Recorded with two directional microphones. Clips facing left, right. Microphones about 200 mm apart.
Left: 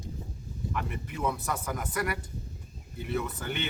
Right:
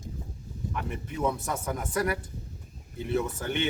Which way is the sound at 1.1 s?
25° right (ahead or behind).